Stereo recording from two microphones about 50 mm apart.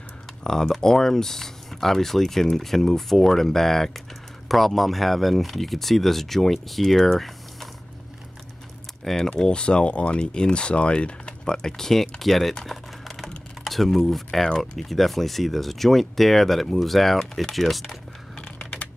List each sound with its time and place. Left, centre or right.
0.4 s speech: centre
9.0 s speech: centre
9.4 s speech: centre
12.6 s typing: centre
13.7 s speech: centre
18.3 s a sound: centre